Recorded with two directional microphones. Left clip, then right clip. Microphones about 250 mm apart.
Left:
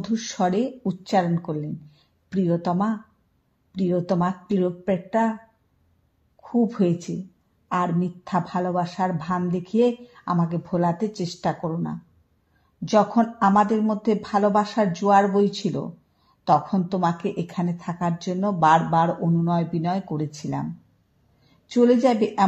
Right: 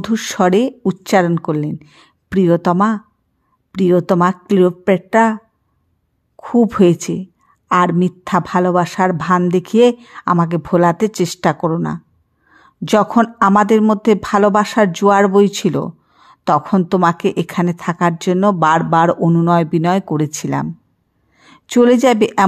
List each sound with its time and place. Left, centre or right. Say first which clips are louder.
0.0 s a woman's voice: right 9 dB; right